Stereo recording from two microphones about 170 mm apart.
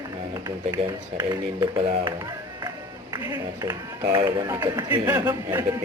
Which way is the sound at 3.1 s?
20° right (ahead or behind).